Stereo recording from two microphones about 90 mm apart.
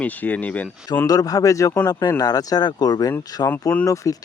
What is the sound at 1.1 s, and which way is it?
Speech, 45° left (ahead or behind).